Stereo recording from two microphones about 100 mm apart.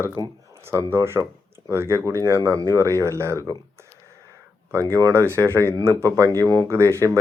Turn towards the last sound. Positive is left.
turn(degrees=-30)  # may be behind; listen again after turning